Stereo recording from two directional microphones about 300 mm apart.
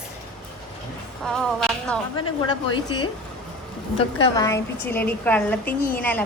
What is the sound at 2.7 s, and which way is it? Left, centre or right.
A woman's voice, centre.